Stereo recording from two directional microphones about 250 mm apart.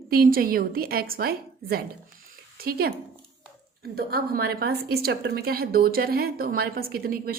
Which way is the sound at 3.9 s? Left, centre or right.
Right.